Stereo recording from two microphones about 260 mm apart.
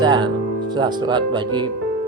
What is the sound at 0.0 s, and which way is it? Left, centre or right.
Speech, centre.